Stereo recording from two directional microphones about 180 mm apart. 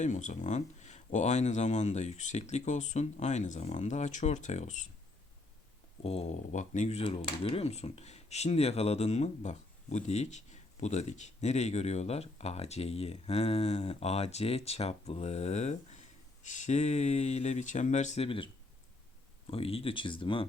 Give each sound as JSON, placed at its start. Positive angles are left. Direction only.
{"t": 0.0, "sound": "speech", "side_deg": 45}
{"t": 6.0, "sound": "speech", "side_deg": 35}
{"t": 19.5, "sound": "speech", "side_deg": 30}